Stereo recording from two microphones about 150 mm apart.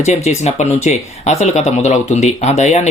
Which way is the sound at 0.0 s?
50° left (ahead or behind).